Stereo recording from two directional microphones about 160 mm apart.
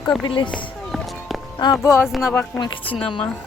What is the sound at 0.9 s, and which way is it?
Music, centre (ahead or behind).